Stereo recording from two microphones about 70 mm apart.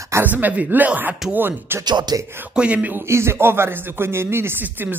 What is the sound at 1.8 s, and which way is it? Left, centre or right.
Music, right.